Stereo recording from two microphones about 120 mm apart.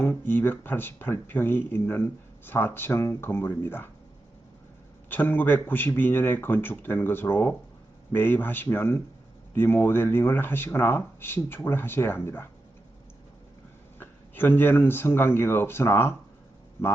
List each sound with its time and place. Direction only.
0.0 s speech: 15° left (ahead or behind)
5.0 s speech: 15° left (ahead or behind)
14.0 s speech: 20° left (ahead or behind)